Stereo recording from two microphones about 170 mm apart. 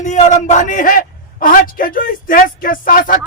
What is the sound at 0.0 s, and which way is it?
Speech, 45° left (ahead or behind).